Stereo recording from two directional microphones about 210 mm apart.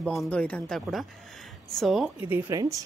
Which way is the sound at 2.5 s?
15° right (ahead or behind).